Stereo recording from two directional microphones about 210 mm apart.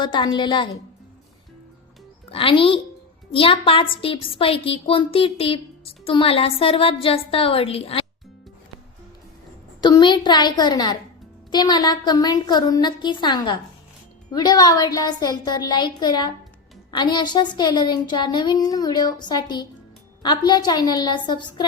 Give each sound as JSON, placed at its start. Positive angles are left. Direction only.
{"t": 0.0, "sound": "a woman's voice", "side_deg": 20}
{"t": 2.3, "sound": "a woman's voice", "side_deg": 25}
{"t": 9.8, "sound": "a woman's voice", "side_deg": 20}